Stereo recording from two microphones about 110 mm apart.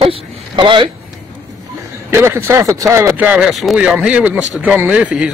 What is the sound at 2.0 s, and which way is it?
Speech, 25° right (ahead or behind).